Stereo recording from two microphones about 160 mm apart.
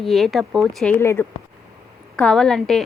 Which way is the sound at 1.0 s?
15° left (ahead or behind).